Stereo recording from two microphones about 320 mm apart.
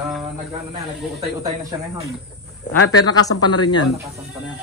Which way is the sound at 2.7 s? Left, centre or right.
Left.